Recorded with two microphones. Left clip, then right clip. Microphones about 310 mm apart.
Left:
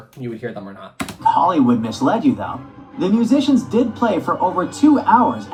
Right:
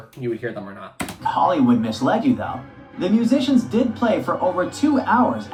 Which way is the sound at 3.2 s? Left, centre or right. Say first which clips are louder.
Left 3 dB; centre.